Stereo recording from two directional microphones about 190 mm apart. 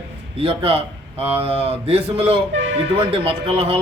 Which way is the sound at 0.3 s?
30° right (ahead or behind).